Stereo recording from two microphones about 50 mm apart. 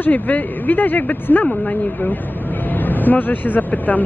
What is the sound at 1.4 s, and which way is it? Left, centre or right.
Speech, centre.